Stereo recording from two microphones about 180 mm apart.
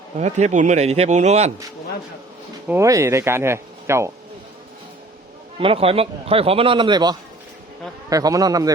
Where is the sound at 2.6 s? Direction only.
15° right (ahead or behind).